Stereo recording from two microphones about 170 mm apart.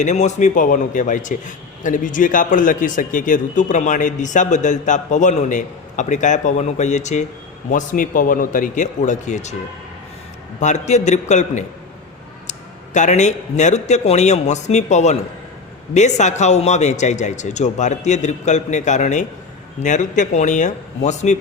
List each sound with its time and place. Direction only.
0.0 s a man's voice: 45° left (ahead or behind)
10.6 s a man's voice: 45° left (ahead or behind)